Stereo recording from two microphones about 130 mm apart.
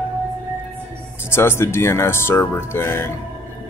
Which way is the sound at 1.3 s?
20° left (ahead or behind).